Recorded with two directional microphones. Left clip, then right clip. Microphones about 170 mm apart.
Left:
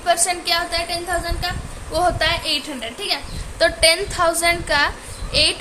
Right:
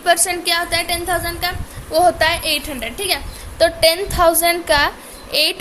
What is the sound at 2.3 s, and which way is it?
Speech, 40° right (ahead or behind).